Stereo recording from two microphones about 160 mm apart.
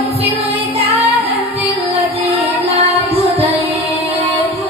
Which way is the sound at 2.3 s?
40° right (ahead or behind).